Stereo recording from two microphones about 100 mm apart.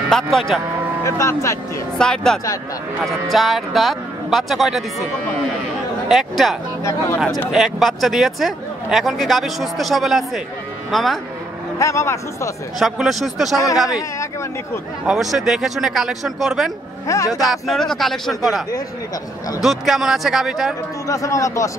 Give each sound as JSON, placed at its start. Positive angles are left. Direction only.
{"t": 0.1, "sound": "speech", "side_deg": 0}
{"t": 1.0, "sound": "speech", "side_deg": 30}
{"t": 2.0, "sound": "speech", "side_deg": 5}
{"t": 6.8, "sound": "speech", "side_deg": 30}
{"t": 7.2, "sound": "speech", "side_deg": -5}
{"t": 11.8, "sound": "speech", "side_deg": 30}
{"t": 12.7, "sound": "speech", "side_deg": -5}
{"t": 15.0, "sound": "speech", "side_deg": -5}
{"t": 19.6, "sound": "speech", "side_deg": 0}
{"t": 21.1, "sound": "a man's voice", "side_deg": 35}